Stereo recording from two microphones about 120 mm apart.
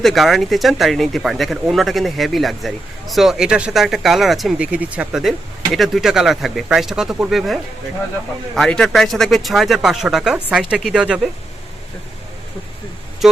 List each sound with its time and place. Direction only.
0.0 s speech: centre (ahead or behind)
13.2 s speech: centre (ahead or behind)